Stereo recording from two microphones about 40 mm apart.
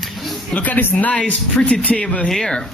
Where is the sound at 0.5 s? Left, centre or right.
Left.